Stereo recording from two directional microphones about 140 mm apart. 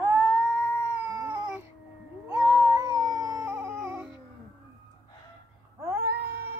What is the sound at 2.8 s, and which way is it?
Dog, 25° right (ahead or behind).